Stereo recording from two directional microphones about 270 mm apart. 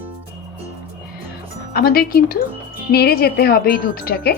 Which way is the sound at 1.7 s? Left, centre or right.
Left.